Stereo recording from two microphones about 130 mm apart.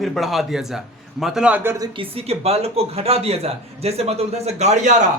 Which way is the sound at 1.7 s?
30° right (ahead or behind).